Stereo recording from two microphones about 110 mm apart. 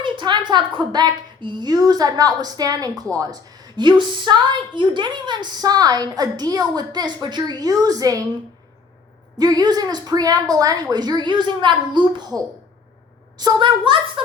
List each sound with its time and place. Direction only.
0.0 s a woman's voice: 45° right (ahead or behind)
9.4 s a woman's voice: 35° right (ahead or behind)
13.4 s a child's voice: 45° right (ahead or behind)